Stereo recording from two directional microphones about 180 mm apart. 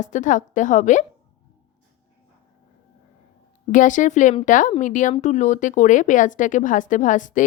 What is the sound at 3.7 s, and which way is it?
Speech, 45° left (ahead or behind).